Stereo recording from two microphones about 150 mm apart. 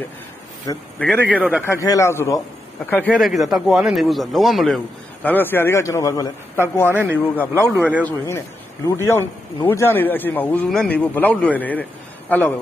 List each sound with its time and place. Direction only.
0.9 s a man's voice: 10° left (ahead or behind)
1.2 s a man's voice: 10° right (ahead or behind)
1.7 s a man's voice: 20° left (ahead or behind)
3.2 s a man's voice: centre (ahead or behind)
5.3 s a man's voice: 15° left (ahead or behind)
7.3 s a man's voice: 10° left (ahead or behind)
7.6 s a man's voice: 15° right (ahead or behind)
8.0 s a man's voice: 15° left (ahead or behind)